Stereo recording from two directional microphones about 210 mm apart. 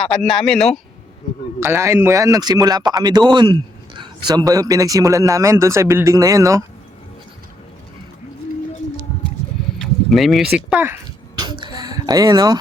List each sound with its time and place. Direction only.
0.0 s a man's voice: 5° left (ahead or behind)
1.6 s speech: 10° right (ahead or behind)
9.8 s speech: centre (ahead or behind)
11.3 s a sound: 20° right (ahead or behind)